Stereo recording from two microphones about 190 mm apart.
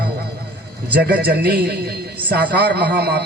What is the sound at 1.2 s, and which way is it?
A man's voice, 55° right (ahead or behind).